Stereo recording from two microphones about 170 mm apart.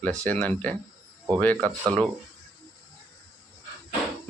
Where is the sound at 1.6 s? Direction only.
20° right (ahead or behind).